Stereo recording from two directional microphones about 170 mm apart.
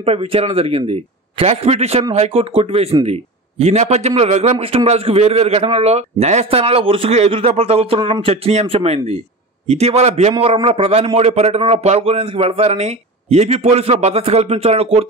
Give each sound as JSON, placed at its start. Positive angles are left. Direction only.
{"t": 0.0, "sound": "speech", "side_deg": -35}